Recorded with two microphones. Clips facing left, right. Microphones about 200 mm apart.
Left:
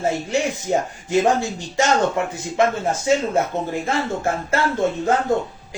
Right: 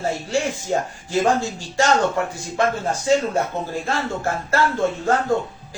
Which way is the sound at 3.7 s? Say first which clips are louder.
Left 2 dB; 20° left (ahead or behind).